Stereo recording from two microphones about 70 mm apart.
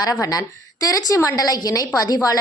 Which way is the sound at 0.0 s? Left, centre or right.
Left.